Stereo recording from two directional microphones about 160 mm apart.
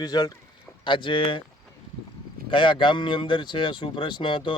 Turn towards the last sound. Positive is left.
turn(degrees=30)  # may be behind; listen again after turning